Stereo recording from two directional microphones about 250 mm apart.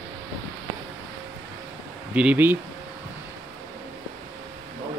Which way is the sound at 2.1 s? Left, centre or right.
Centre.